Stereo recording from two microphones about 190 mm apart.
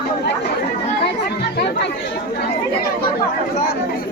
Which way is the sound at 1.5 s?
60° left (ahead or behind).